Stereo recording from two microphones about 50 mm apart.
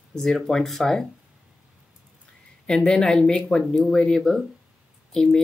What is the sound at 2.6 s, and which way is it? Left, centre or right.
Speech, centre.